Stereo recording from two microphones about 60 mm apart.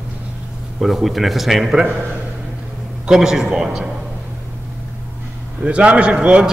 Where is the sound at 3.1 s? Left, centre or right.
Centre.